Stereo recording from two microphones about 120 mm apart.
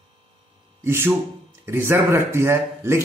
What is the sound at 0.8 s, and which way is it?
A man's voice, 20° right (ahead or behind).